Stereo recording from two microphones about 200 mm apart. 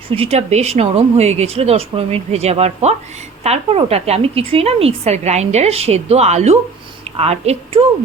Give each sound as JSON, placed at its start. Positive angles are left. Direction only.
{"t": 0.1, "sound": "speech", "side_deg": -30}